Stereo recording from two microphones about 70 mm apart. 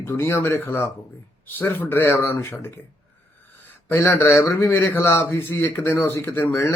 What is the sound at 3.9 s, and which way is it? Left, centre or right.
A man's voice, left.